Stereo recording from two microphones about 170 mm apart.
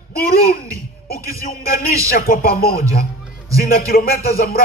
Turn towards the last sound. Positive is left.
turn(degrees=65)  # may be behind; listen again after turning